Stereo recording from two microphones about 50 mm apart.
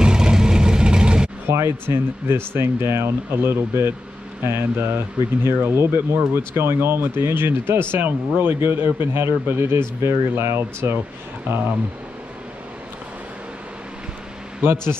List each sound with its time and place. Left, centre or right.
0.0 s vehicle: centre
1.5 s speech: right
14.6 s speech: right